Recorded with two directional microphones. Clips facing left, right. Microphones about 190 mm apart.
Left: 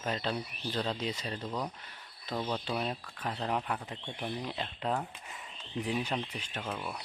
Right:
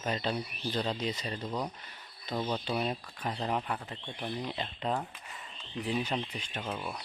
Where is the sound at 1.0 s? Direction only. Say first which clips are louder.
Right 1 dB; 5° left (ahead or behind).